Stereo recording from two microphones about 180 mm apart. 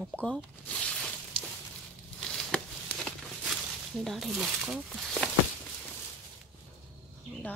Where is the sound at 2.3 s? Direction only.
5° left (ahead or behind).